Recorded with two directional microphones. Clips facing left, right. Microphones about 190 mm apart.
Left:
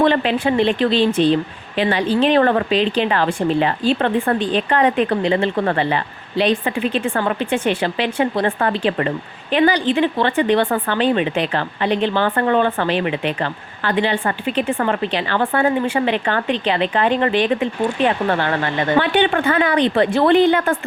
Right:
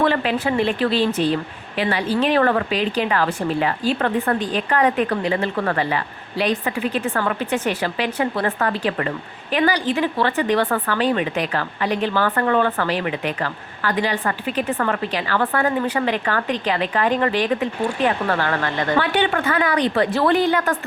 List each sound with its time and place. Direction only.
0.0 s speech: 25° left (ahead or behind)